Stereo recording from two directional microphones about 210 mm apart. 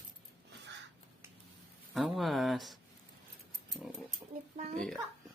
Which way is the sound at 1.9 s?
Centre (ahead or behind).